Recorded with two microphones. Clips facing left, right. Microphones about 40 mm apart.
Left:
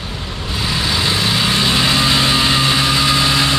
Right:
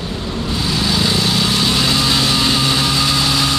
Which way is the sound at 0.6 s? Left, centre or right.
Centre.